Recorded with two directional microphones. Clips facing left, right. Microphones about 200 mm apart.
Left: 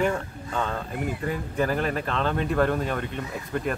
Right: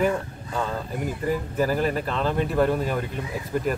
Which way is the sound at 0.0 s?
5° right (ahead or behind).